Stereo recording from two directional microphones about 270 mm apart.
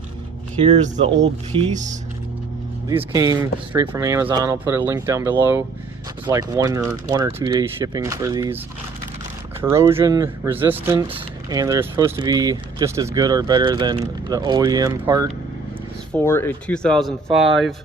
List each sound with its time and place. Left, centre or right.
0.6 s speech: right
3.0 s speech: centre
9.6 s speech: centre
16.2 s speech: centre